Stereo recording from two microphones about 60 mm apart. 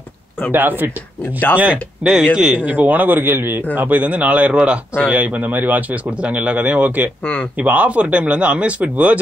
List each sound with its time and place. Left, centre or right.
0.5 s a man's voice: right
1.2 s speech: left
1.6 s a man's voice: right